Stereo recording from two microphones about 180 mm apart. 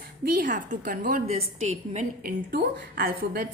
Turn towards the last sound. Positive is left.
turn(degrees=-50)  # may be behind; listen again after turning